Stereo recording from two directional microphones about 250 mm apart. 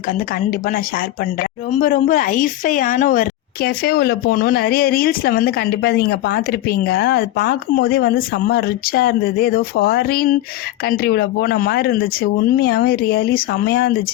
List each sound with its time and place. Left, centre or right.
0.6 s a woman's voice: left